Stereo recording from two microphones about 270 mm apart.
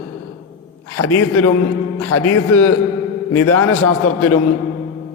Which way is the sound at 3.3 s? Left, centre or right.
Left.